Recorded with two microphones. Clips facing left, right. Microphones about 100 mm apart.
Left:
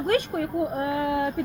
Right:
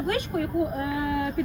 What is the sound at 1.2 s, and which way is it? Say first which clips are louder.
Speech: left 1 dB; 40° left (ahead or behind).